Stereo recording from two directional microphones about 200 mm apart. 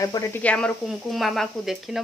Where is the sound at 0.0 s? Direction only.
15° left (ahead or behind).